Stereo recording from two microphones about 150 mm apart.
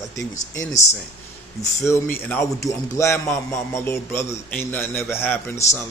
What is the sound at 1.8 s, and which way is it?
A man's voice, 15° left (ahead or behind).